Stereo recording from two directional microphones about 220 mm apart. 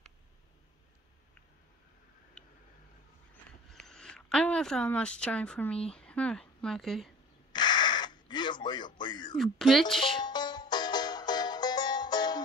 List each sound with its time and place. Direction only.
2.4 s tick-tock: 5° left (ahead or behind)
3.7 s a woman's voice: centre (ahead or behind)
7.5 s a sound: 20° left (ahead or behind)
9.4 s speech: centre (ahead or behind)
10.2 s music: 20° left (ahead or behind)